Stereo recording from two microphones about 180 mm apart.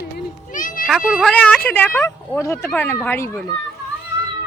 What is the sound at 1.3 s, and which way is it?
Speech, 10° left (ahead or behind).